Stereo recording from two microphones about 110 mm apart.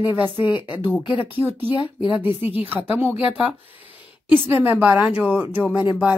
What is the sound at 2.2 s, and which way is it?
A woman's voice, 15° right (ahead or behind).